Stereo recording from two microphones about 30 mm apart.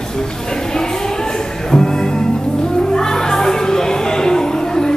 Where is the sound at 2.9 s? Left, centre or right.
Centre.